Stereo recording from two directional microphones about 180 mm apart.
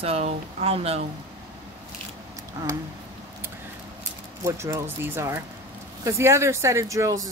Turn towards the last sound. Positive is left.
turn(degrees=-20)  # may be behind; listen again after turning